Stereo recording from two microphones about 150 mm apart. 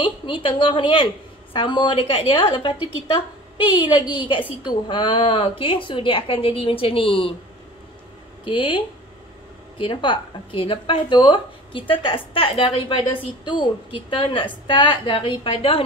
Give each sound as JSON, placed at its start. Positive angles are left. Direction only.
{"t": 0.0, "sound": "a woman's voice", "side_deg": 35}
{"t": 4.1, "sound": "speech", "side_deg": 30}
{"t": 8.5, "sound": "speech", "side_deg": 35}